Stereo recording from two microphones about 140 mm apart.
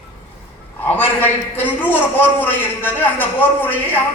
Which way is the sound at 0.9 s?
15° left (ahead or behind).